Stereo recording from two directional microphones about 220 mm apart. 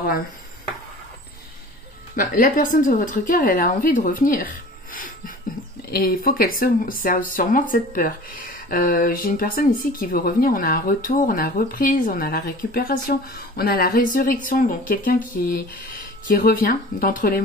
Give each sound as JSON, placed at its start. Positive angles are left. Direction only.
{"t": 2.1, "sound": "a woman's voice", "side_deg": 40}